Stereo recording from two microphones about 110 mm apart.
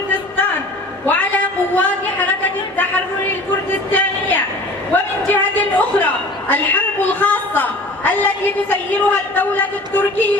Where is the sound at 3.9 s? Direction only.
15° left (ahead or behind).